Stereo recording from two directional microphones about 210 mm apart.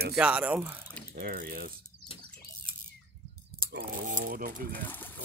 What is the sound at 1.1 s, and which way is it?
Speech, 45° right (ahead or behind).